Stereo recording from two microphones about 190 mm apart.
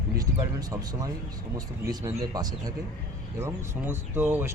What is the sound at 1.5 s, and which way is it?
Speech, 20° right (ahead or behind).